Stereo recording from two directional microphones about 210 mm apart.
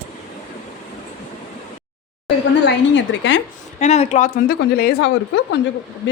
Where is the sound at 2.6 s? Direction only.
60° left (ahead or behind).